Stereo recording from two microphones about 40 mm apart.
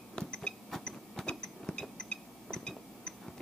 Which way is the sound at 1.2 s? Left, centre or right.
Centre.